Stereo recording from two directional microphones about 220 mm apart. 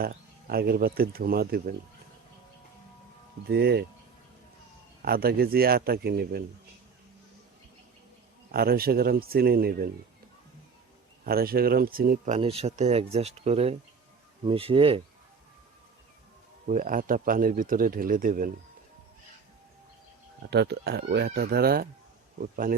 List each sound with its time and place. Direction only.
0.0 s speech: 45° right (ahead or behind)
3.5 s speech: 50° right (ahead or behind)
5.0 s speech: 45° right (ahead or behind)
8.5 s speech: 45° right (ahead or behind)
11.2 s speech: 45° right (ahead or behind); by 15.0 s 25° right (ahead or behind)
16.6 s speech: 35° right (ahead or behind)
20.5 s speech: 50° right (ahead or behind)